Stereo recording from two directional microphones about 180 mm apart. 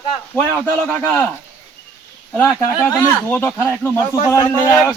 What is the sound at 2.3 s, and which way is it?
Speech, 10° left (ahead or behind).